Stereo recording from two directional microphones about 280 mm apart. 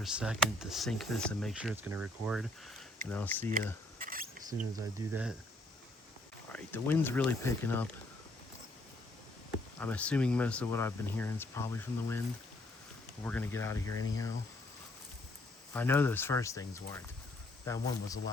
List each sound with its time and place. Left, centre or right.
0.0 s speech: centre
3.9 s a sound: right
4.4 s speech: centre
6.5 s speech: centre
9.8 s speech: centre
13.2 s speech: centre
15.7 s speech: centre